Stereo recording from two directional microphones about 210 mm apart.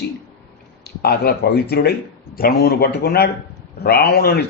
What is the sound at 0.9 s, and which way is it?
A man's voice, 45° left (ahead or behind).